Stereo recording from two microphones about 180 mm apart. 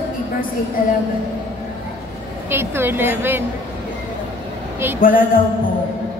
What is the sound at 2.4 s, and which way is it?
Speech, 10° right (ahead or behind).